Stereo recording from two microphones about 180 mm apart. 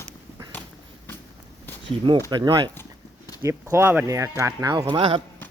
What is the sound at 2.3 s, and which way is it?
Speech, 25° right (ahead or behind).